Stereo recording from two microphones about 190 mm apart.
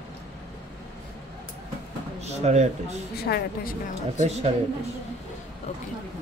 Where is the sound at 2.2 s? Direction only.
35° right (ahead or behind).